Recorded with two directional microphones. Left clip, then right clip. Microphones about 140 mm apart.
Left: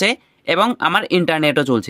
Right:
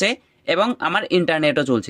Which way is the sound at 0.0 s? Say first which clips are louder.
Left 3 dB; 20° left (ahead or behind).